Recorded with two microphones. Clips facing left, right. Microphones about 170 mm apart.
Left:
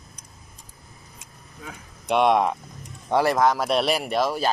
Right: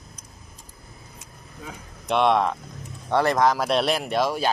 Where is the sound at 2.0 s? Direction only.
10° left (ahead or behind).